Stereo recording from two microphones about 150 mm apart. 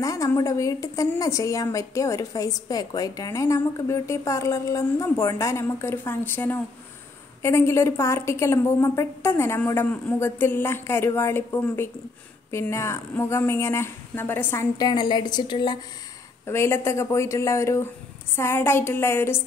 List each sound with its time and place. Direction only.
0.0 s a woman's voice: 20° left (ahead or behind)
14.9 s a woman's voice: 30° left (ahead or behind)
16.4 s a woman's voice: 15° left (ahead or behind)